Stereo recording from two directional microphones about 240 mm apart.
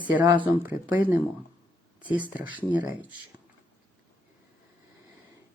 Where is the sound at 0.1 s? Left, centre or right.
Centre.